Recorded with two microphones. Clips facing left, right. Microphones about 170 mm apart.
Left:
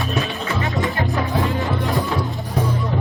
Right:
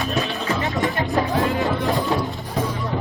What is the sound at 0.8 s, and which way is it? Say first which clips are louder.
Music: right 1 dB; 20° right (ahead or behind).